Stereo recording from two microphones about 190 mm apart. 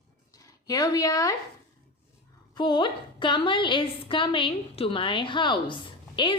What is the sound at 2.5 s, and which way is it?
A woman's voice, 25° left (ahead or behind).